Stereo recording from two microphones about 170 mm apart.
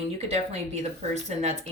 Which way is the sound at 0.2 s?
40° right (ahead or behind).